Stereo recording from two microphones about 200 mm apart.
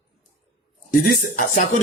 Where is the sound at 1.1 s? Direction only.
45° left (ahead or behind).